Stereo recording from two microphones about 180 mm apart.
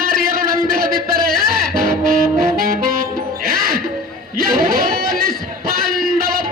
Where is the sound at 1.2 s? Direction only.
55° right (ahead or behind).